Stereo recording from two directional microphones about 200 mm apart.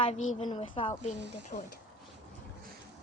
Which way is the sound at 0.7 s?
30° left (ahead or behind).